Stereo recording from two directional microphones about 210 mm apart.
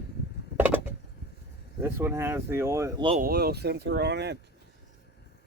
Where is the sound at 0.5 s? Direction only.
10° right (ahead or behind).